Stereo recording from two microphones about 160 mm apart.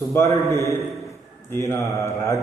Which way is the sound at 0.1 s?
15° left (ahead or behind).